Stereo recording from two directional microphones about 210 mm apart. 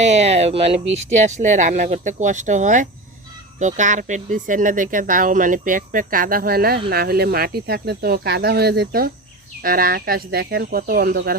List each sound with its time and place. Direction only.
0.0 s speech: 30° right (ahead or behind)